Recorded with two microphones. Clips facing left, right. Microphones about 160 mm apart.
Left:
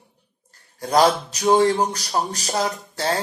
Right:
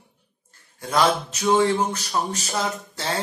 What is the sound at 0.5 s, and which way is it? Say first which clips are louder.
Speech: left 5 dB; 40° left (ahead or behind).